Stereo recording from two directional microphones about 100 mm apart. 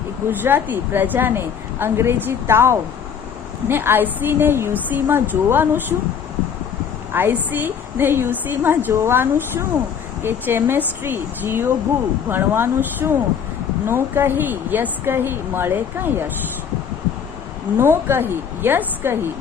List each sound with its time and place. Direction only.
0.3 s a woman's voice: 20° right (ahead or behind)
7.1 s a woman's voice: 20° right (ahead or behind)
17.7 s a woman's voice: 25° right (ahead or behind)